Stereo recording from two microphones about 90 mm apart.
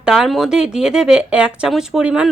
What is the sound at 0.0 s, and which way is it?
Speech, 5° right (ahead or behind).